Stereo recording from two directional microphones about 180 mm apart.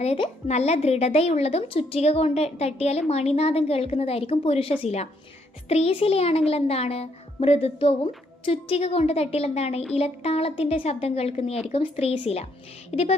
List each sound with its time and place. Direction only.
0.0 s a child's voice: 35° left (ahead or behind)